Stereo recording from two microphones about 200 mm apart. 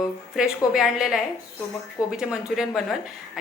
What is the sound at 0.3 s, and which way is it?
A woman's voice, 5° right (ahead or behind).